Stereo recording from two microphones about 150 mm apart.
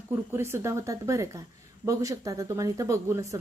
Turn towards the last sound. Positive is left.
turn(degrees=-20)  # may be behind; listen again after turning